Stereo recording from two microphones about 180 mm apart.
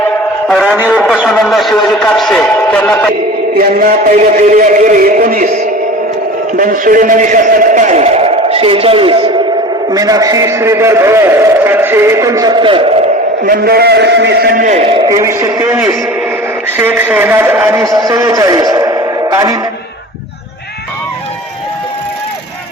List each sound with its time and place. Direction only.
0.4 s a man's voice: centre (ahead or behind)
3.5 s a man's voice: 55° right (ahead or behind)
6.5 s a man's voice: 50° right (ahead or behind); by 12.9 s 30° right (ahead or behind)
13.4 s a man's voice: 55° right (ahead or behind)
14.8 s a man's voice: 25° right (ahead or behind)